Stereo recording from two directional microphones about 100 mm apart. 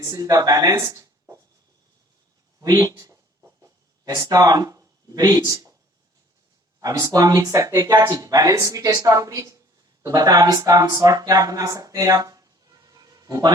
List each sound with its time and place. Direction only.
0.0 s speech: 35° right (ahead or behind)
2.6 s speech: 35° right (ahead or behind)
6.7 s speech: 35° right (ahead or behind)